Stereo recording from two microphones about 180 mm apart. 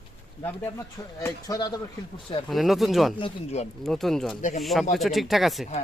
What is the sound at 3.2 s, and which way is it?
Speech, 35° left (ahead or behind).